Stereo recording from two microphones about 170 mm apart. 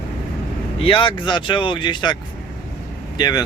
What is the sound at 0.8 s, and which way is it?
Speech, 30° left (ahead or behind).